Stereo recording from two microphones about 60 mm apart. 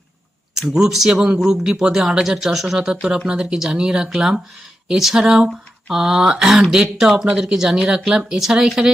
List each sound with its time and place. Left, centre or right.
0.7 s speech: centre